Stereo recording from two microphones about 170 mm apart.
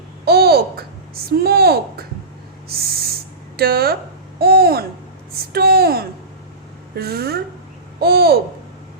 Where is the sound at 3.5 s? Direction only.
65° right (ahead or behind).